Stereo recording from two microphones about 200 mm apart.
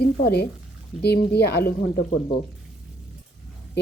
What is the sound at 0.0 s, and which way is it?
Speech, 55° left (ahead or behind).